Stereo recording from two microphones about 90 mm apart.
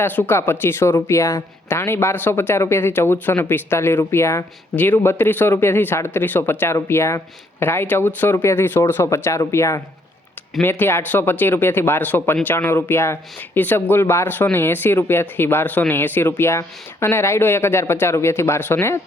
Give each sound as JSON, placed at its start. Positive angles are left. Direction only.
{"t": 0.0, "sound": "speech", "side_deg": 20}